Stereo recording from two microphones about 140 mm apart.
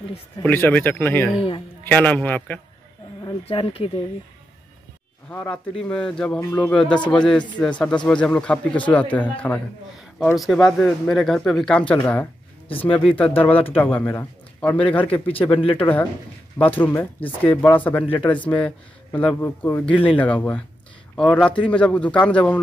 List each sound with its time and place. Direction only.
0.5 s speech: 15° left (ahead or behind)
3.4 s speech: 45° left (ahead or behind)
5.3 s speech: 10° left (ahead or behind)
10.3 s speech: centre (ahead or behind)
12.6 s speech: 40° left (ahead or behind)
13.0 s speech: 10° left (ahead or behind)
16.5 s speech: 10° left (ahead or behind)